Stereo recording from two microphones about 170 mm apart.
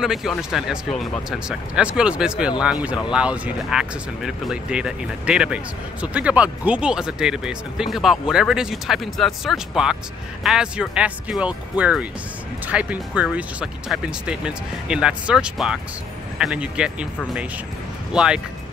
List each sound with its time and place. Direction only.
0.0 s speech: centre (ahead or behind)
18.1 s speech: 5° right (ahead or behind)